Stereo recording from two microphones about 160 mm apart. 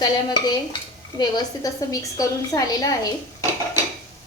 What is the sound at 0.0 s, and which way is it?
A woman's voice, 25° left (ahead or behind).